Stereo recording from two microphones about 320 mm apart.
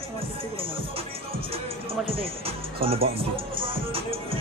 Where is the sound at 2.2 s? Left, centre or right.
Centre.